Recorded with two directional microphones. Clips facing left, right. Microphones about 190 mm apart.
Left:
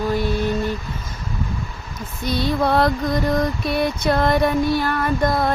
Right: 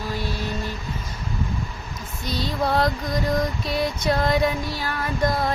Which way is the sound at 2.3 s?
60° left (ahead or behind).